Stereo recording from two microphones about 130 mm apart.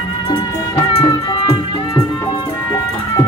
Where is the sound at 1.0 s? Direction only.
40° left (ahead or behind).